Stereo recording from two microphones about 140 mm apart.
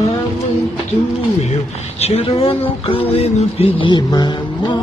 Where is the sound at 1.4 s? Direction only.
50° left (ahead or behind).